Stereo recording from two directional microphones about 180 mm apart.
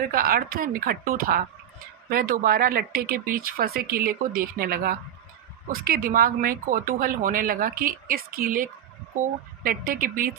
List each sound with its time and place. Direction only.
0.1 s speech: 55° right (ahead or behind)